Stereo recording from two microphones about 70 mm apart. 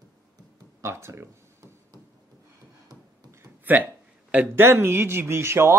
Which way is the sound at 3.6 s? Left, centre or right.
Right.